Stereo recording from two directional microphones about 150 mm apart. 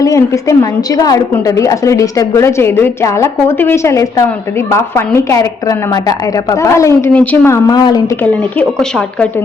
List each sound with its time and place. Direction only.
0.0 s a woman's voice: 20° left (ahead or behind)
8.2 s speech: 10° left (ahead or behind)